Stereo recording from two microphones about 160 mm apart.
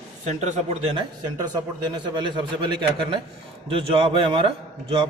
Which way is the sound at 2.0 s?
30° right (ahead or behind).